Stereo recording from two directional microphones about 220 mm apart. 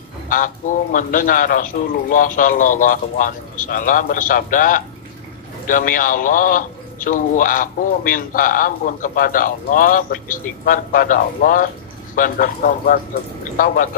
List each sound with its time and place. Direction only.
0.3 s a man's voice: 35° left (ahead or behind)